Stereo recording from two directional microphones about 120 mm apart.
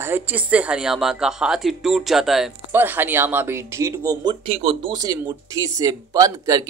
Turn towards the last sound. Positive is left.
turn(degrees=-30)  # may be behind; listen again after turning